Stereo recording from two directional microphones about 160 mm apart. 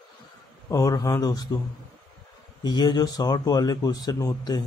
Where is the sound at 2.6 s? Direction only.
25° left (ahead or behind).